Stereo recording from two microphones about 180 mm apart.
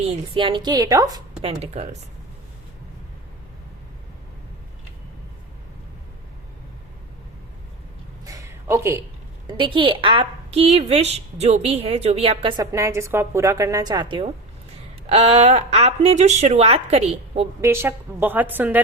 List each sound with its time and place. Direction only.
0.0 s a woman's voice: 30° right (ahead or behind)
1.5 s a woman's voice: 35° right (ahead or behind)
8.2 s a sound: 20° right (ahead or behind)
9.5 s a woman's voice: 25° right (ahead or behind)
17.6 s a woman's voice: 15° right (ahead or behind)